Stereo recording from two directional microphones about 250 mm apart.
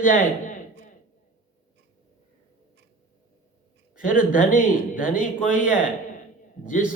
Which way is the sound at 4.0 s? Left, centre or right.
Left.